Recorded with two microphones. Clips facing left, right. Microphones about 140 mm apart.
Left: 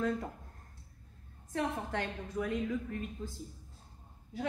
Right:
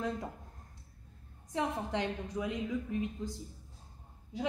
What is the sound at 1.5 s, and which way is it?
A woman's voice, 15° right (ahead or behind).